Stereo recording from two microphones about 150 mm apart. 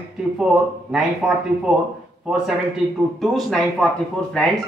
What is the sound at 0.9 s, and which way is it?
A man's voice, 5° right (ahead or behind).